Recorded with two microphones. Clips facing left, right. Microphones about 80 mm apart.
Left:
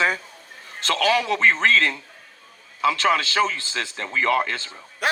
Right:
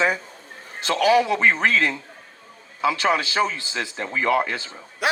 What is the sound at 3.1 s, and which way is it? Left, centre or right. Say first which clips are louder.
Speech: left 1 dB; left.